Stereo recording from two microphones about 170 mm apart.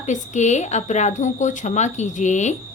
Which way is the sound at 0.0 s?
45° left (ahead or behind).